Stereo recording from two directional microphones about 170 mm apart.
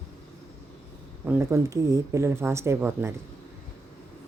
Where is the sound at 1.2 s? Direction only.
15° right (ahead or behind).